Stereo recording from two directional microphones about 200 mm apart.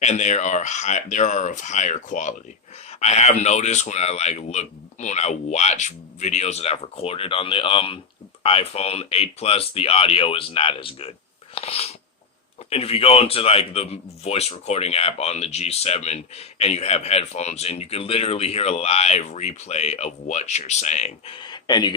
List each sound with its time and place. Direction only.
0.0 s speech: 35° left (ahead or behind)